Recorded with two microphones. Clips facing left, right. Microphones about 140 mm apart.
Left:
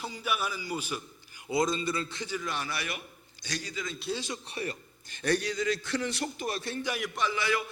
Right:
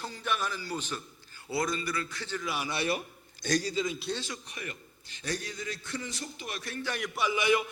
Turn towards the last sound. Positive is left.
turn(degrees=-20)  # may be behind; listen again after turning